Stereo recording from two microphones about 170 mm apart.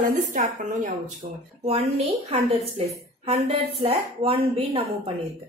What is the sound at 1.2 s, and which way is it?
A woman's voice, 35° right (ahead or behind).